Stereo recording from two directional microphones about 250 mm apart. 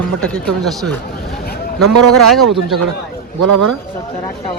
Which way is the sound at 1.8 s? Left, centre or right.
Right.